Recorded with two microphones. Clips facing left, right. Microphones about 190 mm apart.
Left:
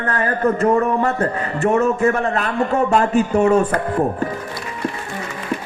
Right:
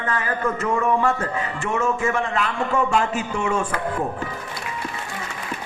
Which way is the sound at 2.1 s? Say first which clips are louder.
Left 4 dB; 40° left (ahead or behind).